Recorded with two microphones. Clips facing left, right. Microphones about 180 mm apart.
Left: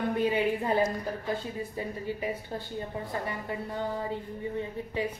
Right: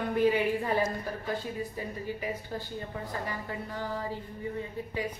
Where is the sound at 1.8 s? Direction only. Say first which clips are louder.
Left 2 dB; 25° left (ahead or behind).